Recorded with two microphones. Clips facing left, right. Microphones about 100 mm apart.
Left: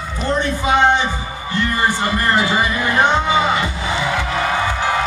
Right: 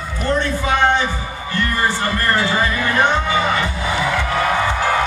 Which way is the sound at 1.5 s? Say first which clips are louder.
Left 1 dB; 15° left (ahead or behind).